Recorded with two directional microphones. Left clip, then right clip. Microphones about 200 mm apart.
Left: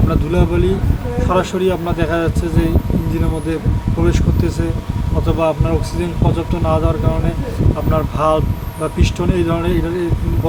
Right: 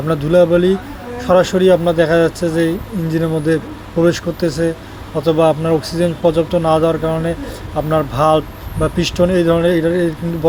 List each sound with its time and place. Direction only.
0.1 s speech: 20° right (ahead or behind)
4.0 s speech: 20° right (ahead or behind)
7.9 s speech: 25° right (ahead or behind)